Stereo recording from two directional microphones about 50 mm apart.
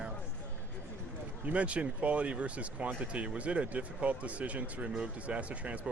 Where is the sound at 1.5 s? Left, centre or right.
Right.